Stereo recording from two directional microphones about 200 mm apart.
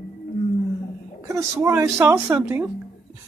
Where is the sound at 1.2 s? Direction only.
15° right (ahead or behind).